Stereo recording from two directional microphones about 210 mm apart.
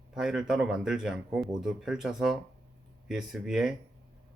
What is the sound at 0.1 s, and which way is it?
Speech, 5° right (ahead or behind).